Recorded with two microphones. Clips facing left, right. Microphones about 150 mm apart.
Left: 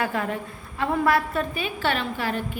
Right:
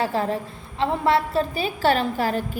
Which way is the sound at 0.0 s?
30° right (ahead or behind).